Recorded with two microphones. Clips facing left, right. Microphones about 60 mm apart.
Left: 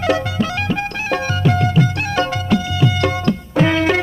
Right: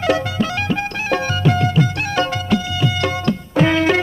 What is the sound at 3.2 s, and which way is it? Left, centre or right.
Music, centre.